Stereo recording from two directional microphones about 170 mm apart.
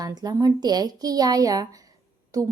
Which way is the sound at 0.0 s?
25° right (ahead or behind).